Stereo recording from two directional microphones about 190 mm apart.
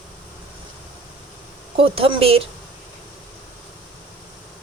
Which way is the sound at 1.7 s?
30° right (ahead or behind).